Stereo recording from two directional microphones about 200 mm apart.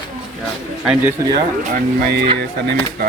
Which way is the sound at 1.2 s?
15° right (ahead or behind).